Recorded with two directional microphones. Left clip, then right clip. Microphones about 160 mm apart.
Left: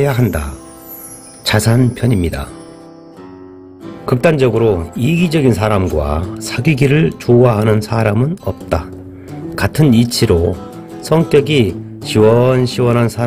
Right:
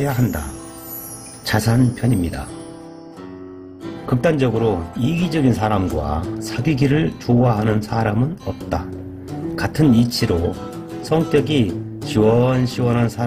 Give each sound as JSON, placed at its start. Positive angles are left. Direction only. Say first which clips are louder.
{"t": 0.0, "sound": "speech", "louder": "left 7 dB", "side_deg": 50}
{"t": 1.4, "sound": "speech", "louder": "left 5 dB", "side_deg": 50}
{"t": 4.0, "sound": "speech", "louder": "left 6 dB", "side_deg": 50}
{"t": 9.6, "sound": "speech", "louder": "left 4 dB", "side_deg": 50}